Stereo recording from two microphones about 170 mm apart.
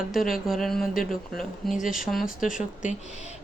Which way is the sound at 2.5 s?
50° left (ahead or behind).